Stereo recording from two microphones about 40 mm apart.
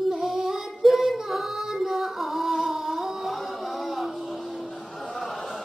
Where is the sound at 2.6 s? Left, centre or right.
Centre.